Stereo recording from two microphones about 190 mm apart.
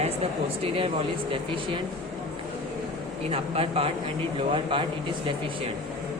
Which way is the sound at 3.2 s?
30° right (ahead or behind).